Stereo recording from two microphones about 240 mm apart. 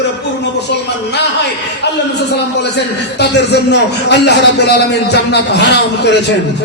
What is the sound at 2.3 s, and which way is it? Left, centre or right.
A man's voice, left.